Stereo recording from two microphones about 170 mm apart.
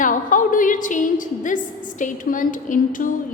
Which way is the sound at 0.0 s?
50° left (ahead or behind).